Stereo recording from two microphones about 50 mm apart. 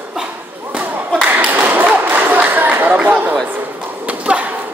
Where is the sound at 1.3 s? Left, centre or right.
Right.